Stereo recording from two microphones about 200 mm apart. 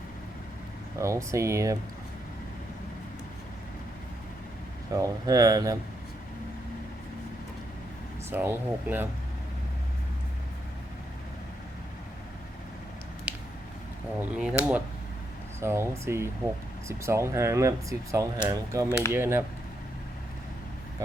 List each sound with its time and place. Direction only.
0.9 s speech: 15° right (ahead or behind)
4.9 s speech: 15° right (ahead or behind)
8.3 s speech: 10° right (ahead or behind)
13.3 s a sound: 5° right (ahead or behind)
14.2 s speech: 5° right (ahead or behind)